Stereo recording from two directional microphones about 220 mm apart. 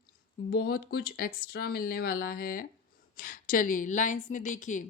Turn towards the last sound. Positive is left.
turn(degrees=35)  # may be behind; listen again after turning